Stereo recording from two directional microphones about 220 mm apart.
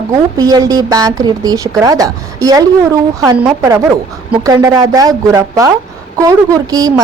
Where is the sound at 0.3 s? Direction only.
15° right (ahead or behind).